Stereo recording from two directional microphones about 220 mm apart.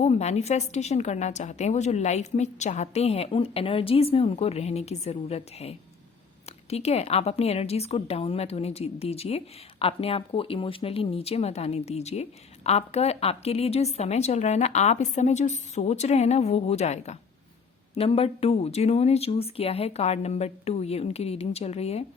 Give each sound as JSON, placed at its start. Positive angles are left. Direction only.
{"t": 0.0, "sound": "a woman's voice", "side_deg": 30}